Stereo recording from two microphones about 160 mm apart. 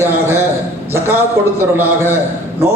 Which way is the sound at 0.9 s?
15° right (ahead or behind).